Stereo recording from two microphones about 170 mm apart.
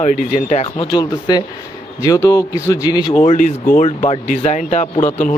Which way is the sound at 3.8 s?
40° left (ahead or behind).